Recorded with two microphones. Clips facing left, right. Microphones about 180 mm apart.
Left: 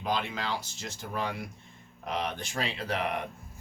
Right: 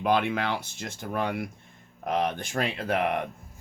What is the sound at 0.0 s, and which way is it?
Speech, 60° right (ahead or behind).